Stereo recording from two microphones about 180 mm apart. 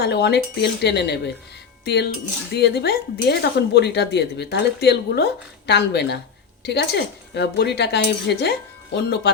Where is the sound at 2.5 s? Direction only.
65° left (ahead or behind).